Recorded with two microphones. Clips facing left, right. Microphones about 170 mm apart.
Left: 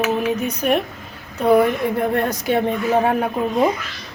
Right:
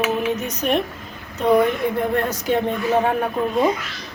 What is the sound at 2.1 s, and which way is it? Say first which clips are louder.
Speech: left 1 dB; 10° left (ahead or behind).